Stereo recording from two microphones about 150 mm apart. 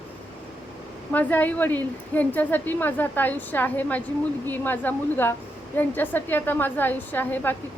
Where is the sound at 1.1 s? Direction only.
10° left (ahead or behind).